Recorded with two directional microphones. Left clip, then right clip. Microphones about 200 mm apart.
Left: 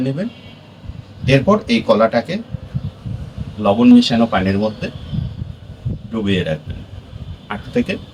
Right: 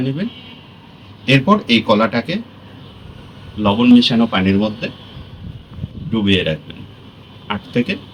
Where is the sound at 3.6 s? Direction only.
5° left (ahead or behind).